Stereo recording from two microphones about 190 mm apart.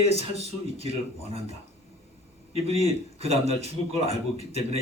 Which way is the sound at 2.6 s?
30° right (ahead or behind).